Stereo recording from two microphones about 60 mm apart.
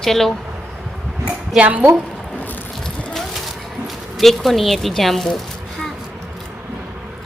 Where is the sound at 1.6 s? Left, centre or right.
Right.